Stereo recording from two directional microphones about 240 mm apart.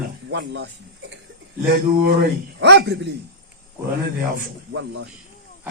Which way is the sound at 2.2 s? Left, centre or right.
Right.